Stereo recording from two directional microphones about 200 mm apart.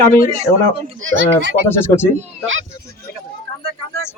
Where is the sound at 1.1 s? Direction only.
65° right (ahead or behind).